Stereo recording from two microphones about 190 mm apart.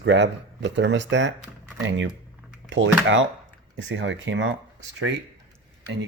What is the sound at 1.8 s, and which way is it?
Speech, 90° right.